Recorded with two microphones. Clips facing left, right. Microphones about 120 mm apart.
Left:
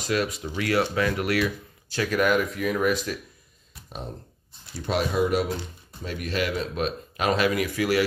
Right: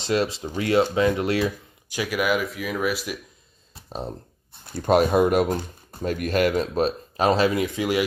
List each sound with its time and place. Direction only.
0.0 s speech: 30° right (ahead or behind)
1.9 s speech: 10° right (ahead or behind)
3.7 s a sound: 35° right (ahead or behind)
4.6 s speech: 50° right (ahead or behind); by 8.0 s 20° right (ahead or behind)